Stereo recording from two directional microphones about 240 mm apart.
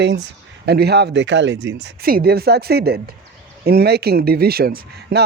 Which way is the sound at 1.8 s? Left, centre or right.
Right.